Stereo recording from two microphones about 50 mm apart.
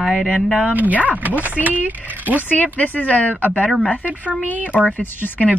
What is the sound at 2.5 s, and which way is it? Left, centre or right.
Speech, left.